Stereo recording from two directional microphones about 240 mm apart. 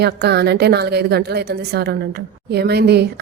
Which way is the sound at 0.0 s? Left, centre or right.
Right.